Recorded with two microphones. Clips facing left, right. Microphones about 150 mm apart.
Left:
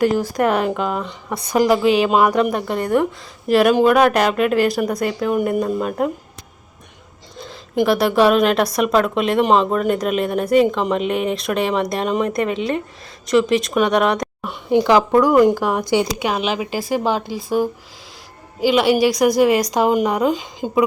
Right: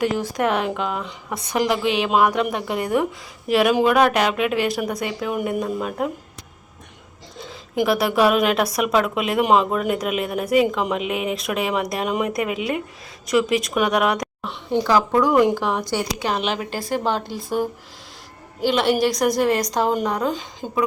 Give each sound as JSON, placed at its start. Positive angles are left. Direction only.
{"t": 0.0, "sound": "speech", "side_deg": 0}
{"t": 7.8, "sound": "speech", "side_deg": 0}
{"t": 14.4, "sound": "a woman's voice", "side_deg": 10}
{"t": 15.2, "sound": "speech", "side_deg": 0}
{"t": 15.9, "sound": "speech", "side_deg": 20}
{"t": 16.2, "sound": "a woman's voice", "side_deg": 5}